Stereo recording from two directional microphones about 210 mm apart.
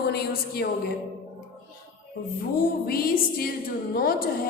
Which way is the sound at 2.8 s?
45° left (ahead or behind).